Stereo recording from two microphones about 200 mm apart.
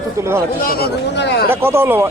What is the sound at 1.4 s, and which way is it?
Speech, 10° right (ahead or behind).